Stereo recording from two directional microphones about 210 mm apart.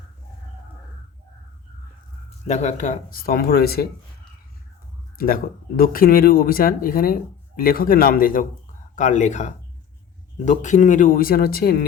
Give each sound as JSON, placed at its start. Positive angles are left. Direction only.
{"t": 2.5, "sound": "speech", "side_deg": 35}
{"t": 5.1, "sound": "speech", "side_deg": 45}